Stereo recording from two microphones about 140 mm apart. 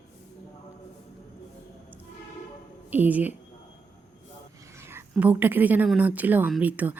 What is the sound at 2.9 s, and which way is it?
Speech, 10° right (ahead or behind).